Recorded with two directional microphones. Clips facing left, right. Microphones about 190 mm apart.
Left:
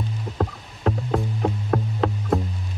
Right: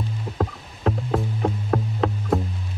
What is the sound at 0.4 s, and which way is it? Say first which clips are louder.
Music: even; centre (ahead or behind).